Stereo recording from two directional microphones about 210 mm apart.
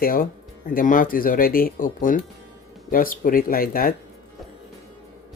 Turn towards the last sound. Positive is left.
turn(degrees=45)  # may be behind; listen again after turning